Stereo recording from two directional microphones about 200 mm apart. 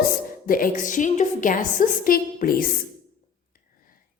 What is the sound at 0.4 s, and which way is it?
A woman's voice, 45° left (ahead or behind).